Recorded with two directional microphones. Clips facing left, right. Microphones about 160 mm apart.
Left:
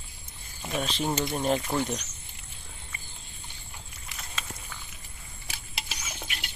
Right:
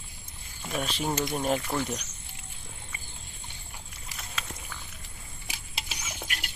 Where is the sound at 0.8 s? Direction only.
5° right (ahead or behind).